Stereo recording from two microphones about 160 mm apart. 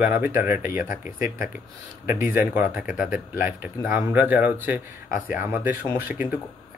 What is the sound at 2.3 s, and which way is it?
Speech, 10° right (ahead or behind).